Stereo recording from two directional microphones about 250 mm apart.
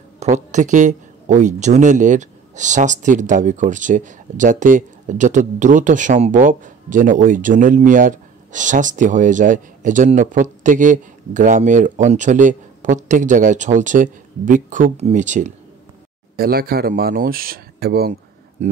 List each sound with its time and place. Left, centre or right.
0.2 s speech: right